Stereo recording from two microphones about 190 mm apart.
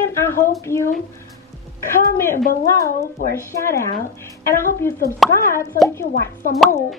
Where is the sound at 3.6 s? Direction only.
15° left (ahead or behind).